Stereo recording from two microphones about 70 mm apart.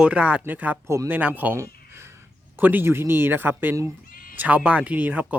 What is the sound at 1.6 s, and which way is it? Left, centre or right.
Speech, right.